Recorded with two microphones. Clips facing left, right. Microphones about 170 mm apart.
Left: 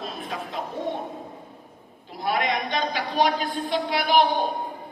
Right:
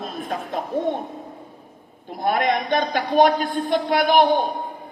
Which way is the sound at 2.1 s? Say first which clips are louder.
Right 5 dB; 50° right (ahead or behind).